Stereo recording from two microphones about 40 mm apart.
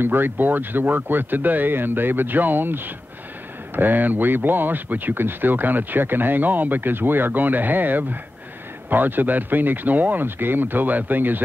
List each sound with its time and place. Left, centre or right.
0.0 s speech: right
5.1 s speech: right
10.2 s speech: right